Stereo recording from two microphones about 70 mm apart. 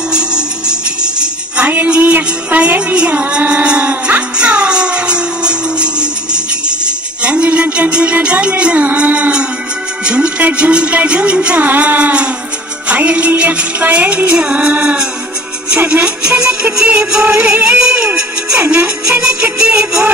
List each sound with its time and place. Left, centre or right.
0.1 s music: centre
1.7 s music: right
19.6 s music: centre